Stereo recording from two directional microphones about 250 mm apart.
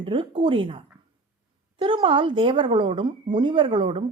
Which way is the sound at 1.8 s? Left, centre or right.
Centre.